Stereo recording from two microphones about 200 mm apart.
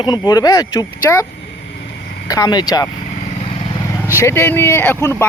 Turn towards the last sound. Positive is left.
turn(degrees=15)  # may be behind; listen again after turning